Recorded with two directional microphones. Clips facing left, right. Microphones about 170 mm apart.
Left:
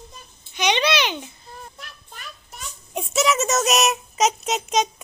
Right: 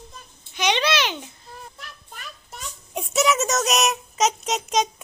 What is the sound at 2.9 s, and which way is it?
A child's voice, centre (ahead or behind).